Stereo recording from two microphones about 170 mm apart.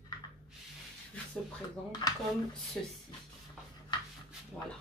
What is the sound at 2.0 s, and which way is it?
Speech, 25° left (ahead or behind).